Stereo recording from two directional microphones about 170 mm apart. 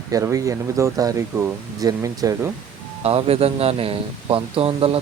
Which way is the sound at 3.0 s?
35° right (ahead or behind).